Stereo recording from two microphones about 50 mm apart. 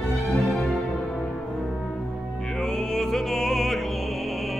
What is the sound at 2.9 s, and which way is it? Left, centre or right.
Music, centre.